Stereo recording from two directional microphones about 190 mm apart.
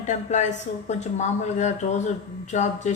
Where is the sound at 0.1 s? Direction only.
40° left (ahead or behind).